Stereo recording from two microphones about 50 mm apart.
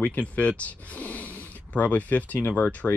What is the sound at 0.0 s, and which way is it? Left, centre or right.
Speech, left.